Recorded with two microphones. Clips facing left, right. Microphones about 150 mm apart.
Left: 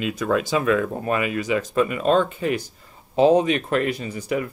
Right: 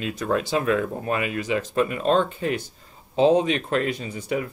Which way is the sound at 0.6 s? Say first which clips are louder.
Left 2 dB; 60° left (ahead or behind).